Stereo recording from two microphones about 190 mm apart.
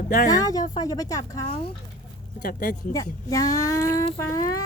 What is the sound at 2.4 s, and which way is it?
Speech, 45° left (ahead or behind).